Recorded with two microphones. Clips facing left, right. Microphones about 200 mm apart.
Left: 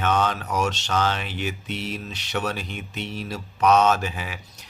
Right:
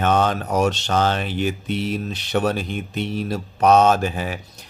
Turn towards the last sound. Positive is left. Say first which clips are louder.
# right 7 dB
turn(degrees=-45)  # may be behind; listen again after turning